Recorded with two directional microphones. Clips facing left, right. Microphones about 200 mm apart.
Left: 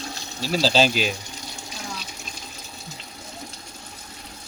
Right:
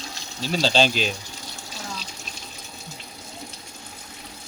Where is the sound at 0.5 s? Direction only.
5° left (ahead or behind).